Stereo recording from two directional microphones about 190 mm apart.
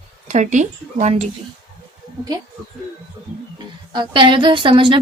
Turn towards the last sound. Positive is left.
turn(degrees=-25)  # may be behind; listen again after turning